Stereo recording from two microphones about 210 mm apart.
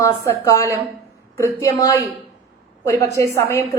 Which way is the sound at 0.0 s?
15° left (ahead or behind).